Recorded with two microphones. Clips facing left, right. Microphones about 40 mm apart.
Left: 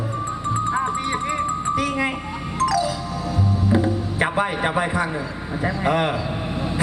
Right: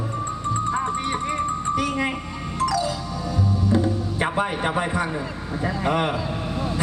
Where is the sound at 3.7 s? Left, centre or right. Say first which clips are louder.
Left 2 dB; centre.